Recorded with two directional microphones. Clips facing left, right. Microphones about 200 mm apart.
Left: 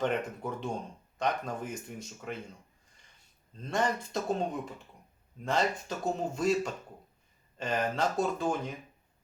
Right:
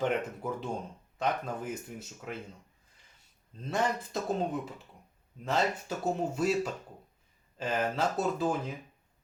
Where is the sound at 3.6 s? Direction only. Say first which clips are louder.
Even; 5° right (ahead or behind).